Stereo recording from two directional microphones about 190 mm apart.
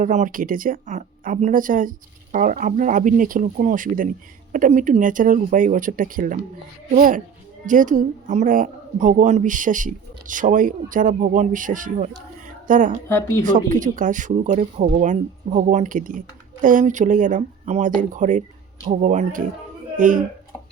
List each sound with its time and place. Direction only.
0.0 s speech: 40° right (ahead or behind)
12.5 s a sound: 45° right (ahead or behind)
13.1 s speech: 15° left (ahead or behind)
13.4 s speech: 40° right (ahead or behind)